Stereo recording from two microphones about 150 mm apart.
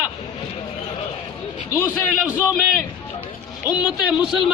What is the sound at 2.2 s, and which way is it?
Speech, 10° right (ahead or behind).